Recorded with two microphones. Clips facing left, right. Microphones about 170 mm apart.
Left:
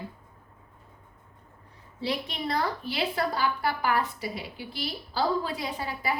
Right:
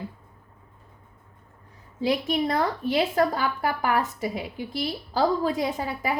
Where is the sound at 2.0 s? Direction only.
45° right (ahead or behind).